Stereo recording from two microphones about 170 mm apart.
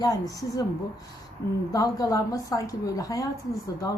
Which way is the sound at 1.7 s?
20° left (ahead or behind).